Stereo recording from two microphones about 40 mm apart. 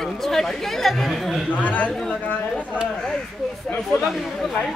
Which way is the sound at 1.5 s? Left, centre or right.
Left.